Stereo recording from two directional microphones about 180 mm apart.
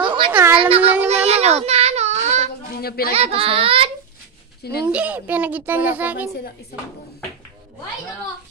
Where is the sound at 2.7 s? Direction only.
60° left (ahead or behind).